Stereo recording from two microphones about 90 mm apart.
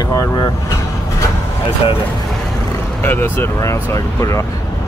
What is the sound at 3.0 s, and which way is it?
Speech, 20° left (ahead or behind).